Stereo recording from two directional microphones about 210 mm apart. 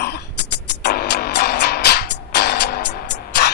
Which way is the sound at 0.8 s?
50° left (ahead or behind).